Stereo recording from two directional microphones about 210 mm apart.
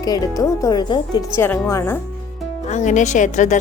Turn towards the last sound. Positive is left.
turn(degrees=35)  # may be behind; listen again after turning